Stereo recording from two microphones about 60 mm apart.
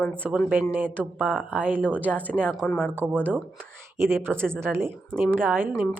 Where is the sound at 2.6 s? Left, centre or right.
Left.